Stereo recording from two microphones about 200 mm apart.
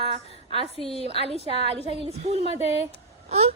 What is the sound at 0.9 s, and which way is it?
A woman's voice, 30° right (ahead or behind).